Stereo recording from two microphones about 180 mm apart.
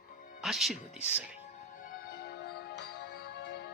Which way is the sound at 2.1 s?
60° left (ahead or behind).